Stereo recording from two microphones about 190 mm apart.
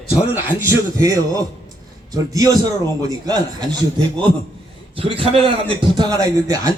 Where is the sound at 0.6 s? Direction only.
15° right (ahead or behind).